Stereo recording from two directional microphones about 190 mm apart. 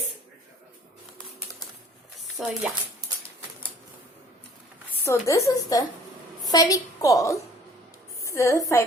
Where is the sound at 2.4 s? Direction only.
Centre (ahead or behind).